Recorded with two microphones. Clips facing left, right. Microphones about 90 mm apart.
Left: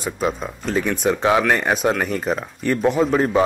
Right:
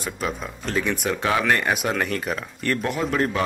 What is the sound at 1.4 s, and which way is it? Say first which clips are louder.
Speech: left 3 dB; 10° left (ahead or behind).